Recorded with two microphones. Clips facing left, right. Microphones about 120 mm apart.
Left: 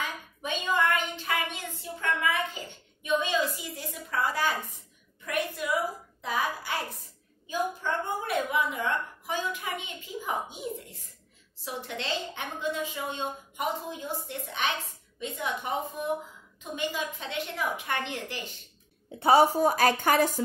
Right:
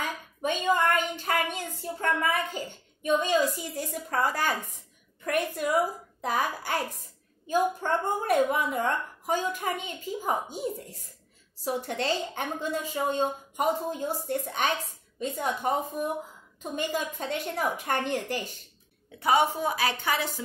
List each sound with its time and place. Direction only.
0.4 s a woman's voice: 45° right (ahead or behind)
19.1 s a woman's voice: 30° left (ahead or behind)